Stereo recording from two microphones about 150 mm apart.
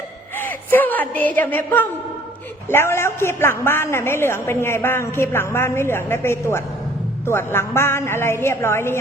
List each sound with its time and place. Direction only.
0.3 s a woman's voice: 15° left (ahead or behind)